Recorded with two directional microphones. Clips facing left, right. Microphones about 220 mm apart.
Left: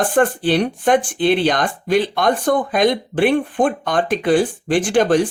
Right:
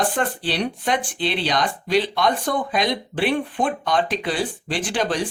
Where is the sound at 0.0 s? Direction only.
50° left (ahead or behind).